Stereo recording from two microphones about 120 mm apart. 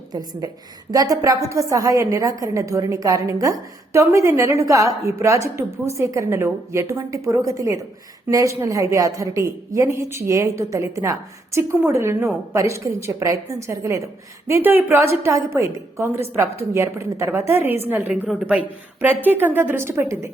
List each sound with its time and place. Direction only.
0.1 s a woman's voice: 30° right (ahead or behind)